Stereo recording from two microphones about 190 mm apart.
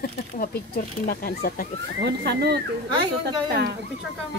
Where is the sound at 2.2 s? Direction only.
60° right (ahead or behind).